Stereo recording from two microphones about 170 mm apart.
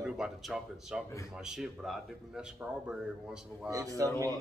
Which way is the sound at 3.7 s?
20° right (ahead or behind).